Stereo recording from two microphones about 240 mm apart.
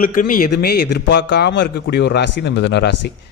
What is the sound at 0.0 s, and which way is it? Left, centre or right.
A man's voice, left.